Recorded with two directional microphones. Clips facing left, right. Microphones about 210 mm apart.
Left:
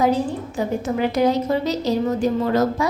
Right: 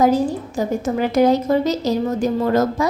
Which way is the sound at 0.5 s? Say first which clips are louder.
Left 1 dB; 45° right (ahead or behind).